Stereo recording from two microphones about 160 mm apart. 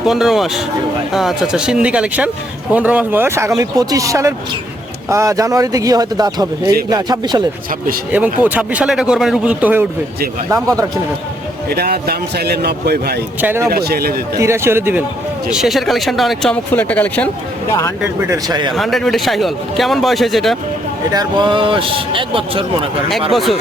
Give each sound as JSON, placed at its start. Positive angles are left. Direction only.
{"t": 0.0, "sound": "a man's voice", "side_deg": 0}
{"t": 8.1, "sound": "speech", "side_deg": -10}
{"t": 10.5, "sound": "a man's voice", "side_deg": -20}
{"t": 11.7, "sound": "a man's voice", "side_deg": -75}
{"t": 13.4, "sound": "speech", "side_deg": -15}
{"t": 13.7, "sound": "speech", "side_deg": -75}
{"t": 14.3, "sound": "speech", "side_deg": -15}
{"t": 15.4, "sound": "a man's voice", "side_deg": -5}
{"t": 18.2, "sound": "a man's voice", "side_deg": -20}
{"t": 18.7, "sound": "a man's voice", "side_deg": 0}
{"t": 21.1, "sound": "a man's voice", "side_deg": -25}
{"t": 23.3, "sound": "a man's voice", "side_deg": 0}